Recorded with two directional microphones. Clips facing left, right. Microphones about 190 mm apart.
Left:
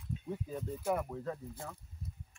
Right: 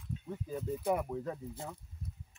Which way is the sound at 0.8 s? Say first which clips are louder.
Right 1 dB; 10° right (ahead or behind).